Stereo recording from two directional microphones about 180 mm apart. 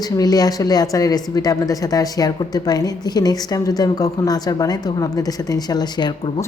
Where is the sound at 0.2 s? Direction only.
20° left (ahead or behind).